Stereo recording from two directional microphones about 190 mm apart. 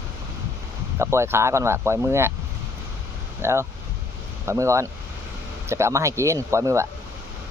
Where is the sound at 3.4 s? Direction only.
15° right (ahead or behind).